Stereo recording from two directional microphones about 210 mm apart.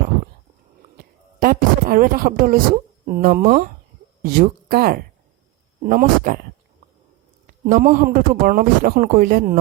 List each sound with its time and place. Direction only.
0.9 s a sound: 45° right (ahead or behind)
3.1 s a man's voice: 40° right (ahead or behind)
7.6 s a man's voice: 40° right (ahead or behind)